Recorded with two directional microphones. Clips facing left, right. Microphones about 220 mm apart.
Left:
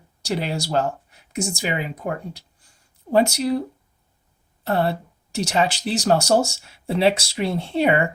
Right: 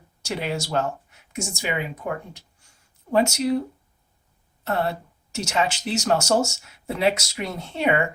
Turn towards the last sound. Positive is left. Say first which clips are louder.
# left 4 dB
turn(degrees=35)  # may be behind; listen again after turning